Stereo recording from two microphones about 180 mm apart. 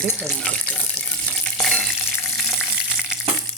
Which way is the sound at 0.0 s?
10° left (ahead or behind).